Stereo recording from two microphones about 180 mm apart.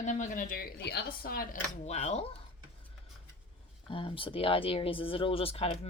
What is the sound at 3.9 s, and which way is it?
Speech, 30° left (ahead or behind).